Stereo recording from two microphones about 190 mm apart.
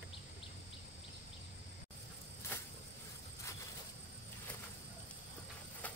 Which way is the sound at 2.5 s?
10° left (ahead or behind).